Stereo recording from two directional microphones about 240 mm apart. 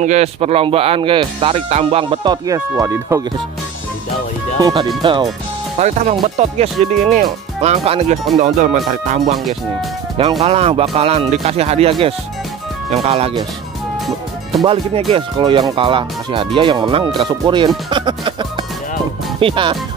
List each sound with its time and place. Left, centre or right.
0.0 s speech: right; by 3.2 s centre
4.6 s speech: centre; by 9.2 s right
10.4 s speech: right
14.6 s speech: right
17.8 s music: right
19.4 s speech: centre